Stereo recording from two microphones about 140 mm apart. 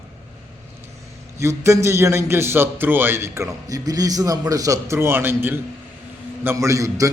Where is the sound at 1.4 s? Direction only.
20° right (ahead or behind).